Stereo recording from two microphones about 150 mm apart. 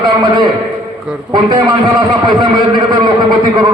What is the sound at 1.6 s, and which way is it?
A man's voice, 30° right (ahead or behind).